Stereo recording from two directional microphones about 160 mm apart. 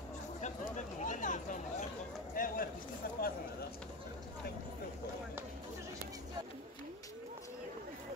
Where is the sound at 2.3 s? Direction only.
65° left (ahead or behind).